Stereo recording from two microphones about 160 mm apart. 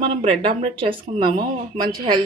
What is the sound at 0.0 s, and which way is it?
Speech, 35° right (ahead or behind).